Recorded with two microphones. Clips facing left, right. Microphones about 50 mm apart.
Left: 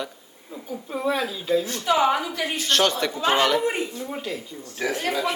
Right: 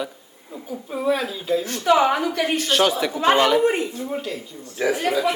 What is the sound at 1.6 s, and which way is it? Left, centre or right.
A woman's voice, right.